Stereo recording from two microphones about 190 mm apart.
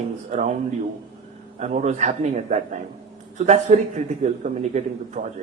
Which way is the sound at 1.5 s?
35° right (ahead or behind).